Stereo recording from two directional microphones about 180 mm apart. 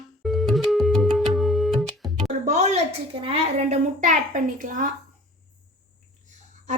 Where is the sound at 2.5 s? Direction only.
40° right (ahead or behind).